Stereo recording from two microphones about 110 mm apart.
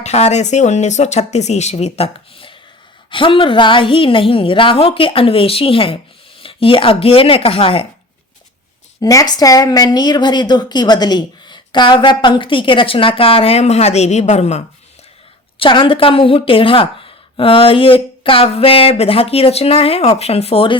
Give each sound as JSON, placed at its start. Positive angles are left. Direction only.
{"t": 0.0, "sound": "speech", "side_deg": 90}
{"t": 3.1, "sound": "a woman's voice", "side_deg": 50}
{"t": 9.0, "sound": "a woman's voice", "side_deg": 35}
{"t": 15.5, "sound": "a woman's voice", "side_deg": 50}